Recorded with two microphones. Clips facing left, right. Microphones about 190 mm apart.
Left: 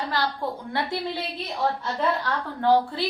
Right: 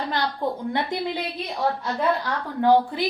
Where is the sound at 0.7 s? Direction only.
15° right (ahead or behind).